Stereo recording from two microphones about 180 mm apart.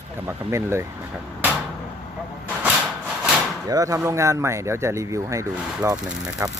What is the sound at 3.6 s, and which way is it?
Speech, 20° right (ahead or behind).